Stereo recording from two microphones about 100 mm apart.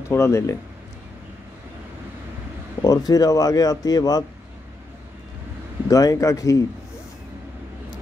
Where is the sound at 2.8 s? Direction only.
40° left (ahead or behind).